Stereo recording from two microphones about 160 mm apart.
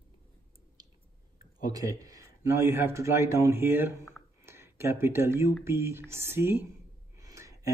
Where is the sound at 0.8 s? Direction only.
25° right (ahead or behind).